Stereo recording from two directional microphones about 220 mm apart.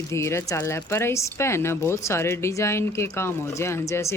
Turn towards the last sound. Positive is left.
turn(degrees=10)  # may be behind; listen again after turning